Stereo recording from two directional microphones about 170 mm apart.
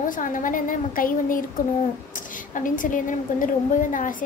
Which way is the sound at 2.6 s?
50° left (ahead or behind).